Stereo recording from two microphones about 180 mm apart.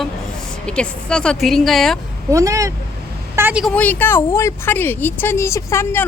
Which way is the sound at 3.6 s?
10° left (ahead or behind).